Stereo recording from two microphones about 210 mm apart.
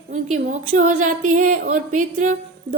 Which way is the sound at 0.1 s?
35° right (ahead or behind).